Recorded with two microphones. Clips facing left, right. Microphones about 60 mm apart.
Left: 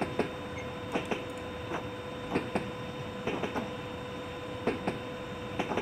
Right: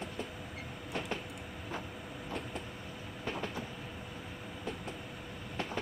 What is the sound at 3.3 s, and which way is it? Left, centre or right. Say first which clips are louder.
Train: left 4 dB; centre.